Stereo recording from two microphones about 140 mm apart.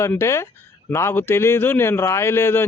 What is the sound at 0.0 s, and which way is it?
A man's voice, 20° left (ahead or behind).